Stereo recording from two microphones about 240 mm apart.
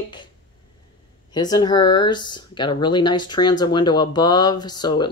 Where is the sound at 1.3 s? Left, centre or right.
Centre.